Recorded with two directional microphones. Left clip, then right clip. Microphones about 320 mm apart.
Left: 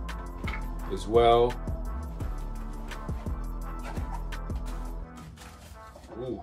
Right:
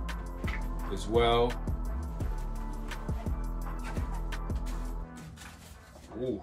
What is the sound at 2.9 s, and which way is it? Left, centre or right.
Music, centre.